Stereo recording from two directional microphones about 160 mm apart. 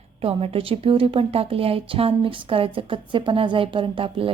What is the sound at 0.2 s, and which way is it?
A woman's voice, 35° right (ahead or behind).